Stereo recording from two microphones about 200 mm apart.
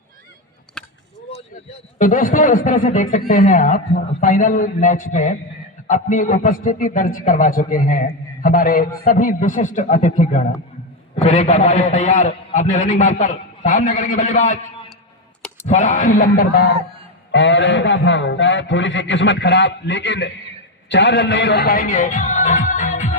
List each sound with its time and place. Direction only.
2.0 s a man's voice: 40° left (ahead or behind)
15.6 s a man's voice: 35° left (ahead or behind)
17.3 s a man's voice: 65° left (ahead or behind); by 23.1 s 40° left (ahead or behind)